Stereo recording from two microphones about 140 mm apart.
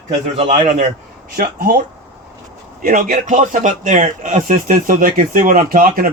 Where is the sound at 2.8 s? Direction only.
80° right.